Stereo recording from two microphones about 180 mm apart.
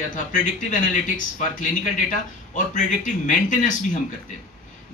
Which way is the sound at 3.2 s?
45° left (ahead or behind).